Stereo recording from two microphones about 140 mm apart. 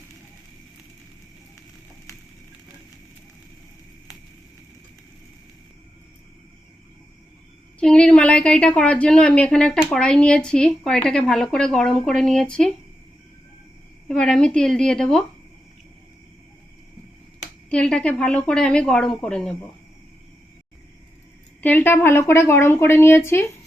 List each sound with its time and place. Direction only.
7.8 s a woman's voice: 5° left (ahead or behind)
14.1 s speech: 5° left (ahead or behind)
17.7 s a woman's voice: 10° left (ahead or behind)
21.6 s a woman's voice: 10° left (ahead or behind)